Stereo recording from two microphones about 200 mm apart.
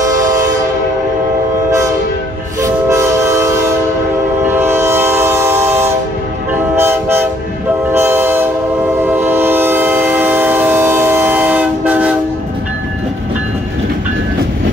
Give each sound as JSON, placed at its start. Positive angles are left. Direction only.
{"t": 0.0, "sound": "train", "side_deg": -15}
{"t": 2.6, "sound": "train", "side_deg": -15}